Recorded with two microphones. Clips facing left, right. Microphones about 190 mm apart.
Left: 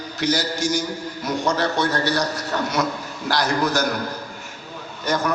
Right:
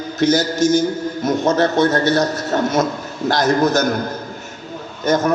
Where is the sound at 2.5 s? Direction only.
45° right (ahead or behind).